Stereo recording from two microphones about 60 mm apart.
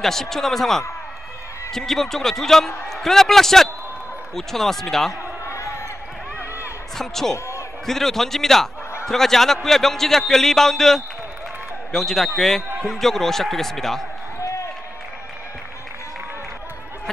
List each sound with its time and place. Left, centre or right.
0.0 s a man's voice: centre
5.5 s basketball bounce: left
7.0 s a man's voice: centre